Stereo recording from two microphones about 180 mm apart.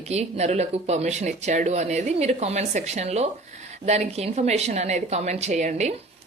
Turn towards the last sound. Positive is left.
turn(degrees=-40)  # may be behind; listen again after turning